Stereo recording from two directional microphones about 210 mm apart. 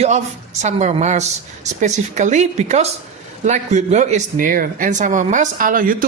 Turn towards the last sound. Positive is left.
turn(degrees=-40)  # may be behind; listen again after turning